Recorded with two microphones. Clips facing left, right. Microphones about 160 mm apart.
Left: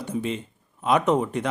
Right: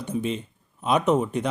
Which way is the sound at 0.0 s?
20° right (ahead or behind).